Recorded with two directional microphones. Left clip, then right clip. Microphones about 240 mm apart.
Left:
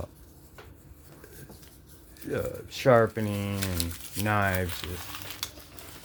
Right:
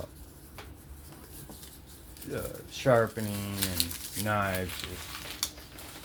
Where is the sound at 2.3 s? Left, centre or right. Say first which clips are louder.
Left 5 dB; left.